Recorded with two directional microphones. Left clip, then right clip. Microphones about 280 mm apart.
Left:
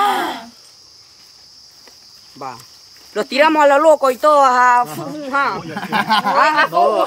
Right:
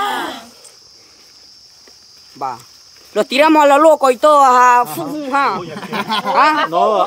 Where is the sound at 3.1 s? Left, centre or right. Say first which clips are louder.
Right 2 dB; right.